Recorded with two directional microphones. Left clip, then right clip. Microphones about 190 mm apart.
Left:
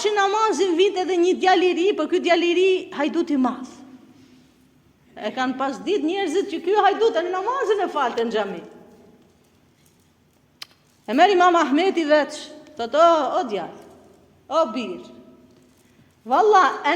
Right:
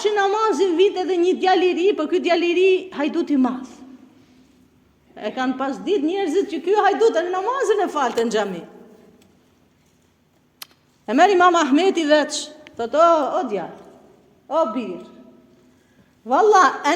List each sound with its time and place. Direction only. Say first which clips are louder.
0.0 s speech: right 1 dB; 15° right (ahead or behind)
5.1 s speech: right 1 dB; 20° right (ahead or behind)
6.3 s a woman's voice: right 1 dB; 30° right (ahead or behind)
10.6 s a sound: left 1 dB; 20° right (ahead or behind)
11.6 s a woman's voice: right 2 dB; 20° right (ahead or behind)
14.4 s speech: right 1 dB; 15° right (ahead or behind)
16.2 s a woman's voice: right 2 dB; 30° right (ahead or behind)